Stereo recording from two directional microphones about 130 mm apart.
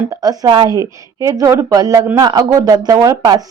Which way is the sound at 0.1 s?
30° right (ahead or behind).